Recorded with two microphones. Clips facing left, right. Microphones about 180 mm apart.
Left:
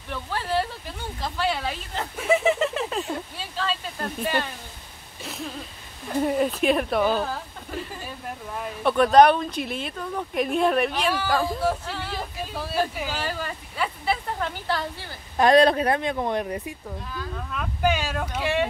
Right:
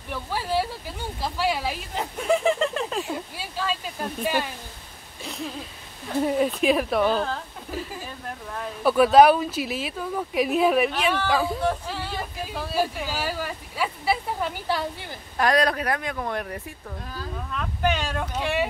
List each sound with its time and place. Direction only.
0.1 s speech: 10° right (ahead or behind)
2.1 s a sound: 5° left (ahead or behind)
3.0 s speech: 10° right (ahead or behind)
15.3 s speech: 25° left (ahead or behind)
17.4 s speech: 5° left (ahead or behind)